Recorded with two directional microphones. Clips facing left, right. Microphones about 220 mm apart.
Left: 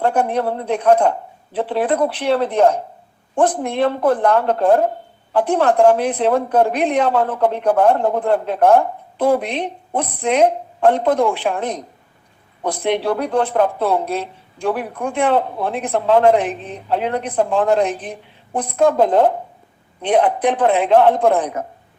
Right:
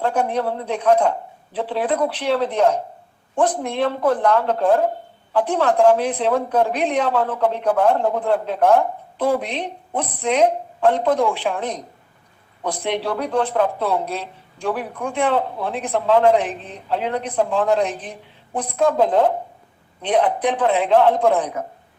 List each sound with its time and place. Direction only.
0.0 s speech: 50° left (ahead or behind)
12.8 s speech: 55° left (ahead or behind)